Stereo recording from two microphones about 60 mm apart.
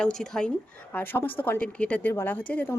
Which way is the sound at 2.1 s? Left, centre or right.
Left.